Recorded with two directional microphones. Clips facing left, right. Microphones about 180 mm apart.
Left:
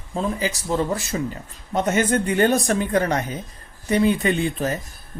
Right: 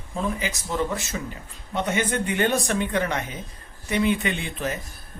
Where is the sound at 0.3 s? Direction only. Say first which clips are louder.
Left 4 dB; 35° left (ahead or behind).